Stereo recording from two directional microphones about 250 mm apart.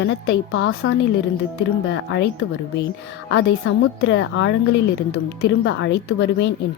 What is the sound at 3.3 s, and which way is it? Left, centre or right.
Speech, left.